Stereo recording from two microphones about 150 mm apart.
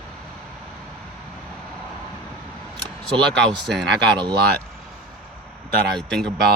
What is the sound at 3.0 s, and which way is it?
Speech, 5° left (ahead or behind).